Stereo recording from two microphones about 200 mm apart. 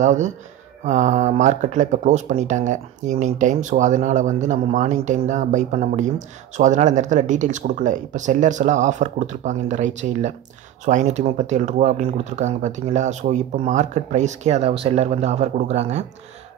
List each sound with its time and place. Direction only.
0.0 s speech: 35° right (ahead or behind)